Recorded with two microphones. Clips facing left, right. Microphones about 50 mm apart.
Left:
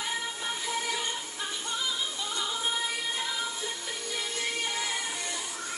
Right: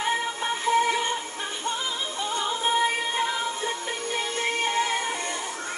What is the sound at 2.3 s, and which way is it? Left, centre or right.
Music, right.